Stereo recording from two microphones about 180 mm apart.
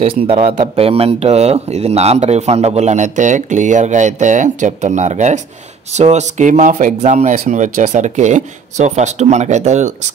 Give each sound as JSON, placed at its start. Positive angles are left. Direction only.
{"t": 0.0, "sound": "speech", "side_deg": -35}